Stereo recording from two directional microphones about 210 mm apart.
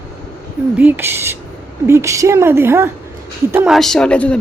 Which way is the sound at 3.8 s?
Centre (ahead or behind).